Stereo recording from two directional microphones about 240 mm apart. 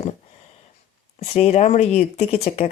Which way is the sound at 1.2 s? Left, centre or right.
Left.